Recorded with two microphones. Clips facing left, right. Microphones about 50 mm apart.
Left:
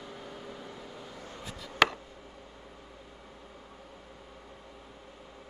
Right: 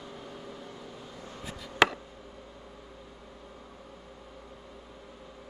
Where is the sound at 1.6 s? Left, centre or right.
Centre.